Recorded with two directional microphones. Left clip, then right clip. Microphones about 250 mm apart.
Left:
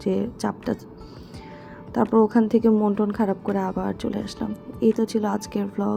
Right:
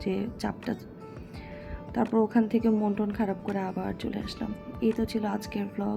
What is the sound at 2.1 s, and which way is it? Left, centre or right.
Speech, centre.